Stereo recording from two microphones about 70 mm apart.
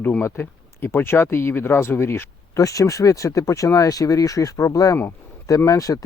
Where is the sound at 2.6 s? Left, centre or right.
Left.